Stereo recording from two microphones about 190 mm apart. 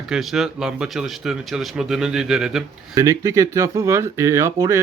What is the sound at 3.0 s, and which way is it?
Speech, 15° right (ahead or behind).